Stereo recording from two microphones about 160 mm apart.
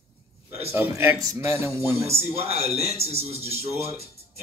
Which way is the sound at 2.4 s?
40° right (ahead or behind).